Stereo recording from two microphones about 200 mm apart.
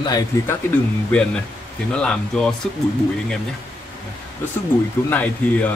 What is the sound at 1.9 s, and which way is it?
Speech, 5° left (ahead or behind).